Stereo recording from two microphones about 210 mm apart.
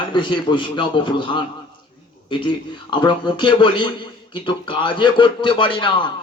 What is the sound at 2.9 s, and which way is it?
A man's voice, 20° left (ahead or behind).